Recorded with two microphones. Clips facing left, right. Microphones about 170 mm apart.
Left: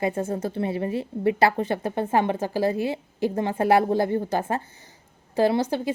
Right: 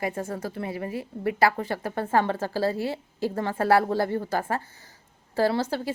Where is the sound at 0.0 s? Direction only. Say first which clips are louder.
Left 4 dB; 25° left (ahead or behind).